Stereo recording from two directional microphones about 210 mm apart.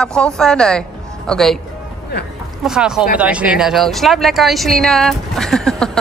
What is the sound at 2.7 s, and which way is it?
Speech, 5° right (ahead or behind).